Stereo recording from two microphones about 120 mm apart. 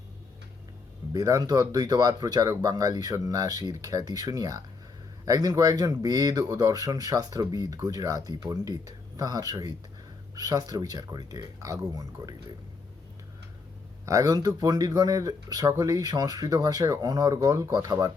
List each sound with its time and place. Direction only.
1.1 s speech: 30° right (ahead or behind)
14.0 s speech: 30° right (ahead or behind)